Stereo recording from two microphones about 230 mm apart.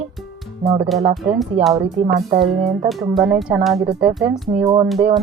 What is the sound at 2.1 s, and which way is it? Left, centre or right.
Speech, right.